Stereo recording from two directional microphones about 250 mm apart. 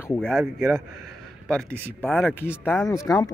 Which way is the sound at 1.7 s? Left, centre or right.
Centre.